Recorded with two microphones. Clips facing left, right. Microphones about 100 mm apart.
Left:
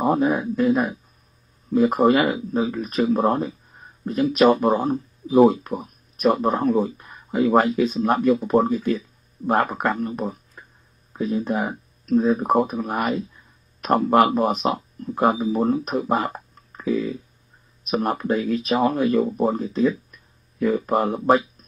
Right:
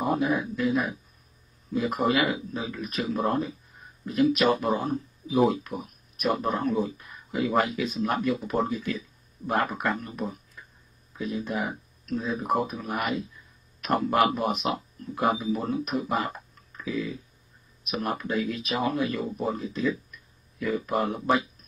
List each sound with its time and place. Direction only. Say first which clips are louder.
0.0 s speech: left 6 dB; 35° left (ahead or behind)